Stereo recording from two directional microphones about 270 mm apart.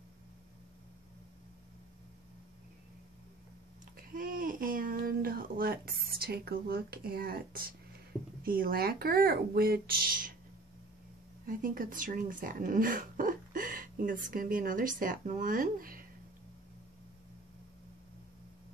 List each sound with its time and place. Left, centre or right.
3.9 s a sound: right
8.5 s speech: right
11.4 s speech: right